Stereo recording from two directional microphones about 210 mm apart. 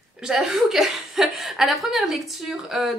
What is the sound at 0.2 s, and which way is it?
A woman's voice, centre (ahead or behind).